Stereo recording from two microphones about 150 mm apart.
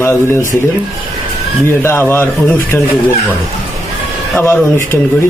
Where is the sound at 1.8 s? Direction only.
15° left (ahead or behind).